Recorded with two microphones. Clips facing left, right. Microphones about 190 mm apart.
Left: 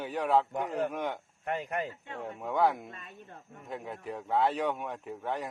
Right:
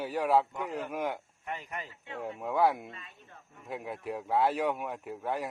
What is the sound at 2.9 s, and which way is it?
Speech, 45° left (ahead or behind).